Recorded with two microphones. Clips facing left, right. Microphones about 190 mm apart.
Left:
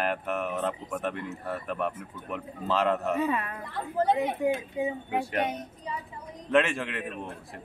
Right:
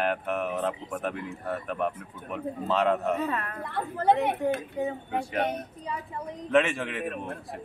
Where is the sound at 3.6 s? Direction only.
60° right (ahead or behind).